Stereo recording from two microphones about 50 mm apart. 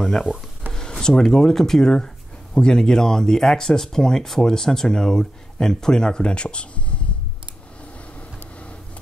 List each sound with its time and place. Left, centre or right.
0.3 s speech: centre
0.7 s speech: centre